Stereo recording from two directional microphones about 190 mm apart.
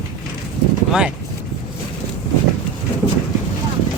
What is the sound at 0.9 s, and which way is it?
Speech, 5° right (ahead or behind).